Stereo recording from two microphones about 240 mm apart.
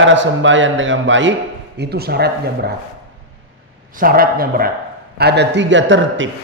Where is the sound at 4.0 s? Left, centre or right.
Right.